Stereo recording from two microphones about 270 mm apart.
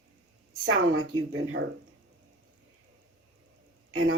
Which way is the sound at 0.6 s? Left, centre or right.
Right.